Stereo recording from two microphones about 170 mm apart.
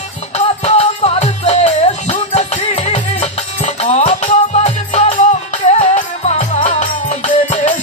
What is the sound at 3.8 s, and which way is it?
Music, 40° left (ahead or behind).